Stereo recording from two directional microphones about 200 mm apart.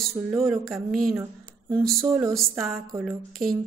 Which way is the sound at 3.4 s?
45° right (ahead or behind).